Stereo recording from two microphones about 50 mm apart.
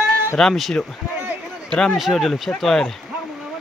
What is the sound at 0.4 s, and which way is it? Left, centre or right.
Speech, centre.